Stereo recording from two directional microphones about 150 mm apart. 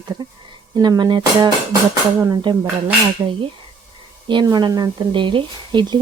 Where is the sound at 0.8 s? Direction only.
25° right (ahead or behind).